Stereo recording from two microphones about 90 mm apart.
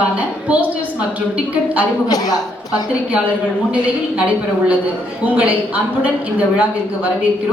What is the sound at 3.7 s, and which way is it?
A woman's voice, 15° right (ahead or behind).